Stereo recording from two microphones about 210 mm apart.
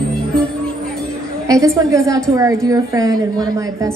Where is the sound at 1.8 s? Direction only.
15° right (ahead or behind).